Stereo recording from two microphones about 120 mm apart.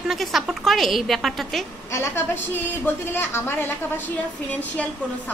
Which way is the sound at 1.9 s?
20° left (ahead or behind).